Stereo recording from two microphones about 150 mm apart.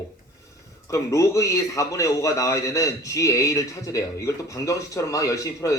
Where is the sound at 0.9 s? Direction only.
20° left (ahead or behind).